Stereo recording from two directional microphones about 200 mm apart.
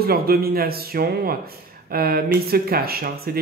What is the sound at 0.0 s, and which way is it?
A man's voice, 50° right (ahead or behind).